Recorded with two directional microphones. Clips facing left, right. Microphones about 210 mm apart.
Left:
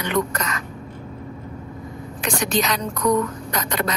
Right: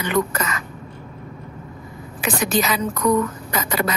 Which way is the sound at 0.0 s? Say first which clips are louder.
Right 2 dB; 5° right (ahead or behind).